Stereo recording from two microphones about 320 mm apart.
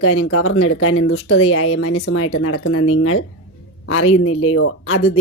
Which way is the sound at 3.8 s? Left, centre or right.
Left.